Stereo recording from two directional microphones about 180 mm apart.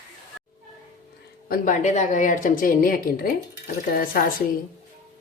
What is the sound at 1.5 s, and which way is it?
A woman's voice, 45° left (ahead or behind).